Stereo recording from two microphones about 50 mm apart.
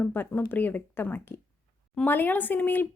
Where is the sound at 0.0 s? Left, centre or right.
Left.